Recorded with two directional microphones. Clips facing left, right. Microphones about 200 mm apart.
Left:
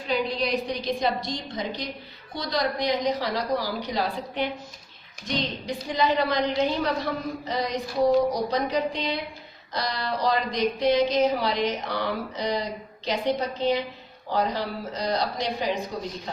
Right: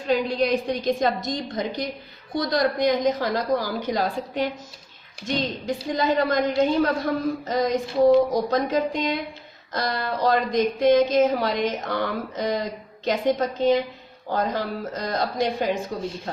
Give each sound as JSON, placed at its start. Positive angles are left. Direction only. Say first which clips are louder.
{"t": 0.3, "sound": "speech", "louder": "right 4 dB", "side_deg": -50}